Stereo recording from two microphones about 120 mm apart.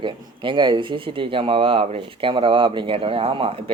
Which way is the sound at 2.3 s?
45° right (ahead or behind).